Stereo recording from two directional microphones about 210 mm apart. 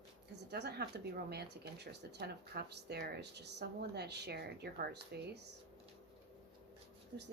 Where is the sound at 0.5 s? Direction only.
50° right (ahead or behind).